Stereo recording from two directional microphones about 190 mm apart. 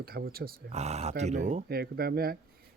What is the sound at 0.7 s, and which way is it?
Speech, 35° right (ahead or behind).